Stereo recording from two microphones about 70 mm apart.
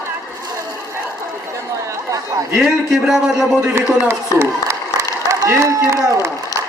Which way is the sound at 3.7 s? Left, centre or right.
Right.